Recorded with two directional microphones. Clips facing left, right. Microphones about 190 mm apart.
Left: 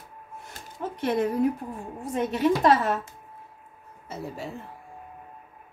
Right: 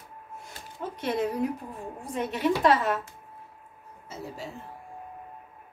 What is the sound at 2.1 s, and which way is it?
Speech, 45° left (ahead or behind).